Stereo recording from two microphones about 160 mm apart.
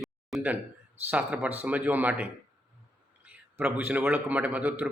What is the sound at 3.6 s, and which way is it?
Speech, 10° right (ahead or behind).